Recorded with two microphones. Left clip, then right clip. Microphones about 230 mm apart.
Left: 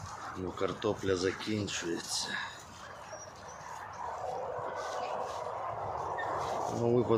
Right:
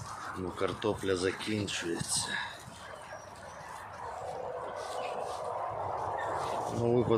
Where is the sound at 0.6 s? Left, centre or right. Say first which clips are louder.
Right 1 dB; centre.